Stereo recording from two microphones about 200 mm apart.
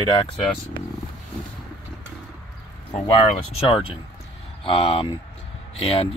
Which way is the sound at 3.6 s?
25° left (ahead or behind).